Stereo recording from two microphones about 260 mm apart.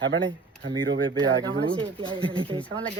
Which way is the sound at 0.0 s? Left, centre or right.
Right.